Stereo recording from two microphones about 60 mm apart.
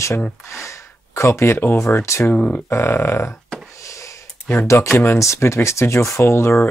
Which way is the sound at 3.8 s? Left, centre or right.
Left.